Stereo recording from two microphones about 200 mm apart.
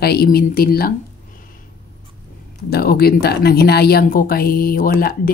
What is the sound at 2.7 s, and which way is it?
A woman's voice, 50° left (ahead or behind).